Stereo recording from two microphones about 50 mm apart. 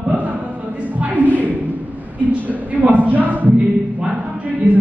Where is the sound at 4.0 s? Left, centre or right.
Right.